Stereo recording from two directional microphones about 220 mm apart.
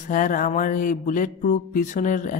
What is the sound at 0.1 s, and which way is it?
Speech, 35° left (ahead or behind).